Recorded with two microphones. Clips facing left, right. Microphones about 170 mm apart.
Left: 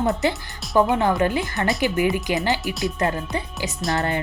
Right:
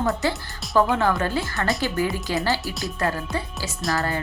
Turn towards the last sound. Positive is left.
turn(degrees=20)  # may be behind; listen again after turning